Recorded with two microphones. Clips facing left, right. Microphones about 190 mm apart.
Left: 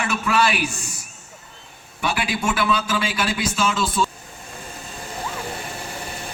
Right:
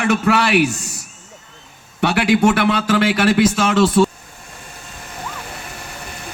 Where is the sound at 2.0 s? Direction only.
75° right (ahead or behind).